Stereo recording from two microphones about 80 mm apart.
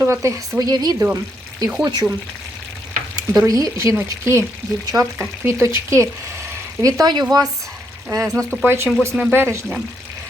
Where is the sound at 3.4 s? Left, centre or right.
Right.